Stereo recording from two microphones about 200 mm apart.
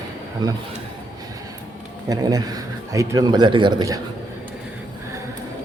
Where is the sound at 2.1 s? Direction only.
20° right (ahead or behind).